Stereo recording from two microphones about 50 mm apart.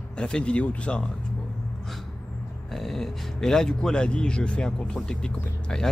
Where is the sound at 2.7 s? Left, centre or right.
Centre.